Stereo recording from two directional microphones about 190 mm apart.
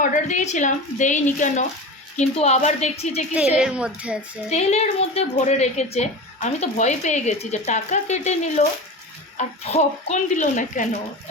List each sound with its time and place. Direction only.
0.0 s a woman's voice: 40° left (ahead or behind)
3.3 s a child's voice: 5° right (ahead or behind)
4.4 s a woman's voice: 35° left (ahead or behind)